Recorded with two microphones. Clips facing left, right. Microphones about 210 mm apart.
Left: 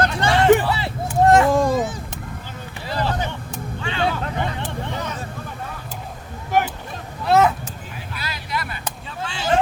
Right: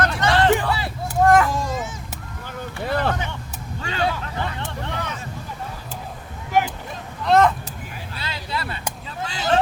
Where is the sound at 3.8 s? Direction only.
40° right (ahead or behind).